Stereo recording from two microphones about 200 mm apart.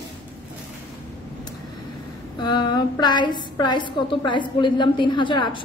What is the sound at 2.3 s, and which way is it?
A woman's voice, 20° left (ahead or behind).